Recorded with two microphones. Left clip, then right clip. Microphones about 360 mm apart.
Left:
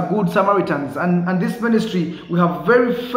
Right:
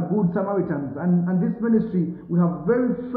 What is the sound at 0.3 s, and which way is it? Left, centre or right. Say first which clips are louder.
A man's voice: left 8 dB; centre.